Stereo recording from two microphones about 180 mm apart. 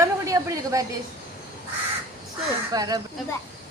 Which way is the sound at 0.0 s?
20° right (ahead or behind).